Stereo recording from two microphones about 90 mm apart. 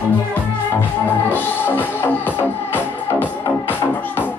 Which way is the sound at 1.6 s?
20° left (ahead or behind).